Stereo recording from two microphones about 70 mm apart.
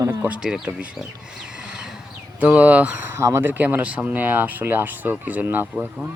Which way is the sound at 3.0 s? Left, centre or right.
Right.